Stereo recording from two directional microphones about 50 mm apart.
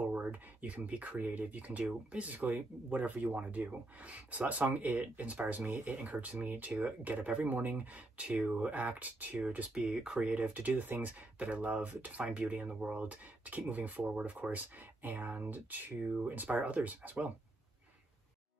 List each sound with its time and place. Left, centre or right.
0.1 s speech: right
9.8 s speech: centre
10.5 s speech: right
12.2 s speech: right